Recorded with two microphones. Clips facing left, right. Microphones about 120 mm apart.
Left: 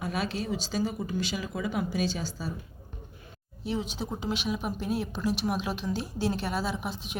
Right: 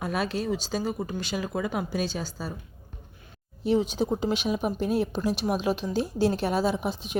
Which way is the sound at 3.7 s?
45° right (ahead or behind).